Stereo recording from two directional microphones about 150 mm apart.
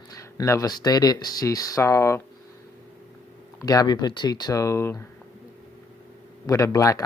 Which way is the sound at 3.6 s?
25° left (ahead or behind).